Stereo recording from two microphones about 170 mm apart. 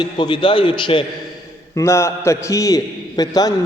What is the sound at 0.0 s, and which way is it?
A man's voice, 30° left (ahead or behind).